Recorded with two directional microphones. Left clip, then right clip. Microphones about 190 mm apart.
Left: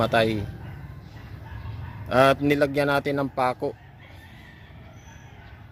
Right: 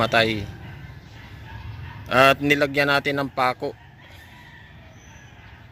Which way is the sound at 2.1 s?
Centre (ahead or behind).